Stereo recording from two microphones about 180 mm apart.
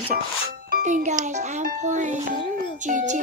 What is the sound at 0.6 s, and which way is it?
A child's voice, 50° right (ahead or behind).